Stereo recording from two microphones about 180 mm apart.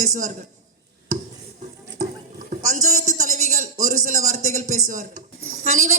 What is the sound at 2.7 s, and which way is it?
A man's voice, 45° right (ahead or behind).